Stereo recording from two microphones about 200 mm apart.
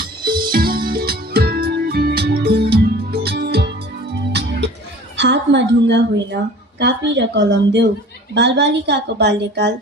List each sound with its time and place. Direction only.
0.0 s music: 45° right (ahead or behind)
5.1 s a woman's voice: 60° right (ahead or behind)